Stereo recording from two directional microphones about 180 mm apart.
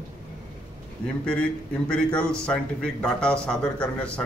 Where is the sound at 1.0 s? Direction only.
5° left (ahead or behind).